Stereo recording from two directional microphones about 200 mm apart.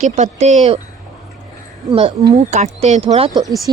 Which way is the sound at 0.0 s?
35° right (ahead or behind).